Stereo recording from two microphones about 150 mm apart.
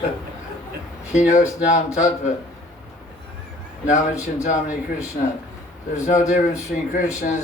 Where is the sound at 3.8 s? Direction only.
55° left (ahead or behind).